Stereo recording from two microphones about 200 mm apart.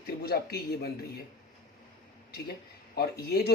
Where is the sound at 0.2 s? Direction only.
50° left (ahead or behind).